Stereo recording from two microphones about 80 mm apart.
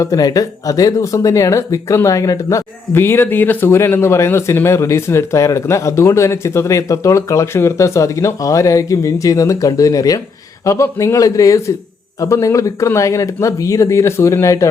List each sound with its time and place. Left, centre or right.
0.0 s speech: left